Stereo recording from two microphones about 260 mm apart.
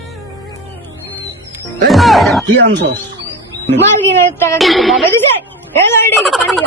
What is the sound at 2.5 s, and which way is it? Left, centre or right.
Speech, right.